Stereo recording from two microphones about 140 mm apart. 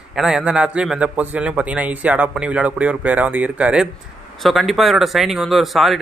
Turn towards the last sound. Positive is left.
turn(degrees=0)  # may be behind; listen again after turning